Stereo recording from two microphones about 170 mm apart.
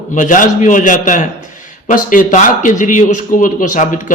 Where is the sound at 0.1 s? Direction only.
50° left (ahead or behind).